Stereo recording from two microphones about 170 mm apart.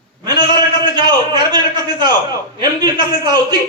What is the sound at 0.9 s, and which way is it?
A man's voice, 25° right (ahead or behind).